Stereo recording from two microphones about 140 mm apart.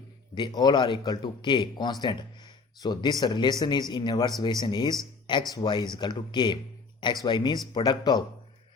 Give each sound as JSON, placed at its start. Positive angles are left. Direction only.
{"t": 0.3, "sound": "a man's voice", "side_deg": 30}